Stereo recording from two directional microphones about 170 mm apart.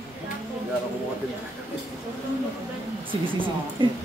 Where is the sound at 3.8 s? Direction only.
30° right (ahead or behind).